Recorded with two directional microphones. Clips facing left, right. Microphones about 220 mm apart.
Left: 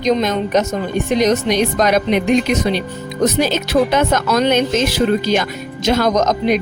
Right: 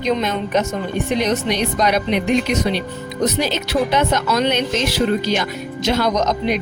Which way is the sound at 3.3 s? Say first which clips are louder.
Left 4 dB; 45° left (ahead or behind).